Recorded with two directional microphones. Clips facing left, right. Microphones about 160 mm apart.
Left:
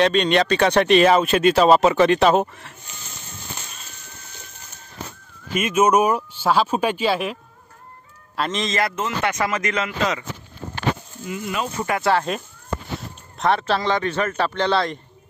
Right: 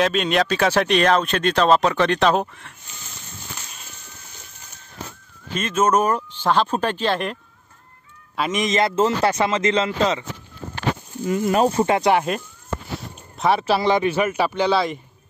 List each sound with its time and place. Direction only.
0.0 s speech: centre (ahead or behind)
5.5 s speech: 10° left (ahead or behind)
8.4 s speech: 10° right (ahead or behind); by 10.2 s 30° right (ahead or behind)
11.2 s speech: 40° right (ahead or behind)
11.8 s speech: 20° right (ahead or behind)
13.4 s speech: 5° right (ahead or behind)